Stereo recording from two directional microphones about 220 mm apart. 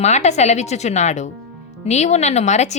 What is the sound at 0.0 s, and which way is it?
Speech, 30° left (ahead or behind).